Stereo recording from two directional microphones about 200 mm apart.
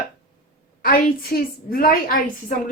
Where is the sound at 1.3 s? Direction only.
50° left (ahead or behind).